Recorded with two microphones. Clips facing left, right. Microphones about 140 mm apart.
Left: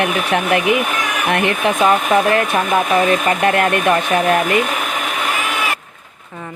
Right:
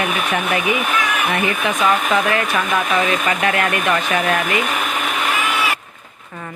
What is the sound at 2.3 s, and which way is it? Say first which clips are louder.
A woman's voice: left 3 dB; 50° left (ahead or behind).